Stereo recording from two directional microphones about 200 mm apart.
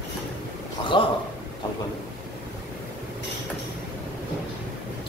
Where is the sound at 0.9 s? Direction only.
25° left (ahead or behind).